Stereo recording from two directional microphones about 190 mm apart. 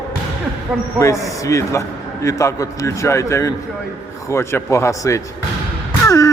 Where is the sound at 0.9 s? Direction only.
15° left (ahead or behind).